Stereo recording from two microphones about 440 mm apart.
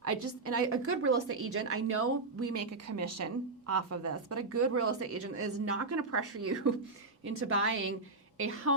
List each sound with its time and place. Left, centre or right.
0.0 s a woman's voice: right